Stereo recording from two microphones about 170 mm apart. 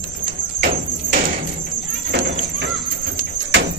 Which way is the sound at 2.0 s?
85° right.